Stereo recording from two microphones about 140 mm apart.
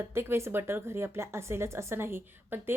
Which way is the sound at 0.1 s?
15° right (ahead or behind).